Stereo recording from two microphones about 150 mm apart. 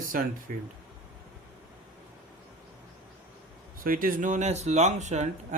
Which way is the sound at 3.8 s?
70° right (ahead or behind).